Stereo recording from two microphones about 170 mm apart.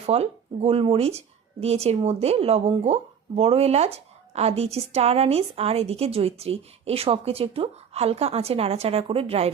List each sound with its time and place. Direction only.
0.0 s speech: 35° right (ahead or behind)